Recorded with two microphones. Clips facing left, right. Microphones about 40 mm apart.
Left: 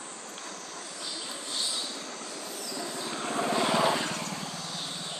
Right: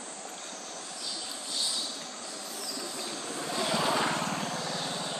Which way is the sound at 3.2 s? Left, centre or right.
Left.